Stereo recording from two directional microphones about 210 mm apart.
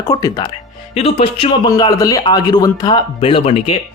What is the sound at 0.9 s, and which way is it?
A man's voice, 30° left (ahead or behind).